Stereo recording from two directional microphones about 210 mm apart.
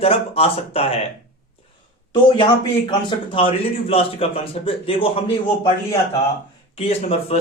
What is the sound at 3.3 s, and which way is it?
A man's voice, 25° left (ahead or behind).